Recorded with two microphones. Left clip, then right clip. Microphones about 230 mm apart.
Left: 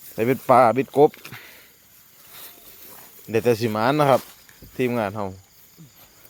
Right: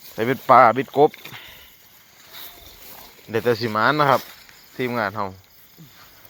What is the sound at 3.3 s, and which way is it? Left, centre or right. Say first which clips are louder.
Speech: even; left.